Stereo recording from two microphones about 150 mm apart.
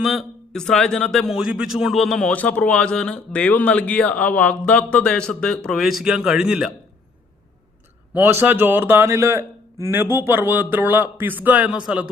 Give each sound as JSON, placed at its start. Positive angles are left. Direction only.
{"t": 0.0, "sound": "a man's voice", "side_deg": 0}
{"t": 8.1, "sound": "speech", "side_deg": -15}